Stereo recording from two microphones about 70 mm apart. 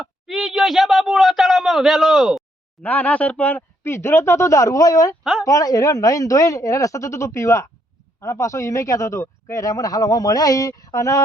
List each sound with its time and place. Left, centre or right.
0.0 s speech: centre
2.8 s speech: left
3.8 s a man's voice: left
5.2 s speech: centre
5.5 s a man's voice: left